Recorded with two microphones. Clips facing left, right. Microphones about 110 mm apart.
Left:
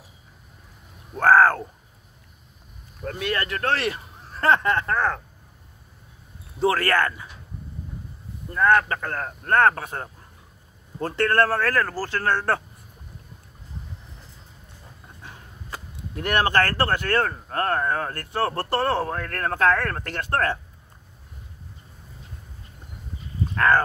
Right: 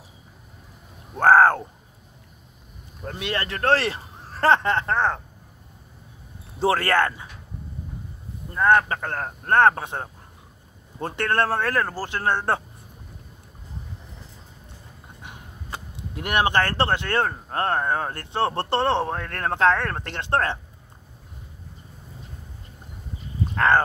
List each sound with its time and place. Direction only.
1.1 s speech: 30° right (ahead or behind)
3.1 s speech: 25° right (ahead or behind)
6.6 s speech: 30° right (ahead or behind)
8.5 s speech: 25° right (ahead or behind)
15.2 s speech: 20° right (ahead or behind)
23.5 s speech: 25° right (ahead or behind)